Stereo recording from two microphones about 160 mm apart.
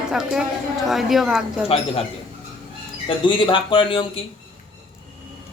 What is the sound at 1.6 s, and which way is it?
Speech, 35° left (ahead or behind).